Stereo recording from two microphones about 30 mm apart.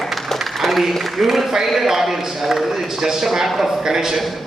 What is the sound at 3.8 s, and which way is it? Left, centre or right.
Speech, centre.